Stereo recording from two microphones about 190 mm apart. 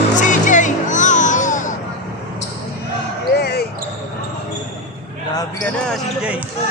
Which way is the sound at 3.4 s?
60° left (ahead or behind).